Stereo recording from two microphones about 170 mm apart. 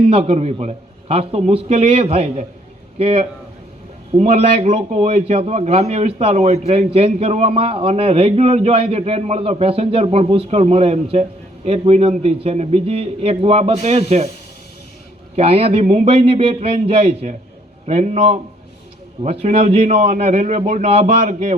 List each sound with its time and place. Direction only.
0.1 s a man's voice: 35° right (ahead or behind)
15.4 s a man's voice: 35° right (ahead or behind)